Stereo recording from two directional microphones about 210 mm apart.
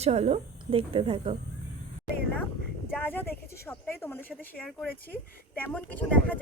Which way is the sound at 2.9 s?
10° left (ahead or behind).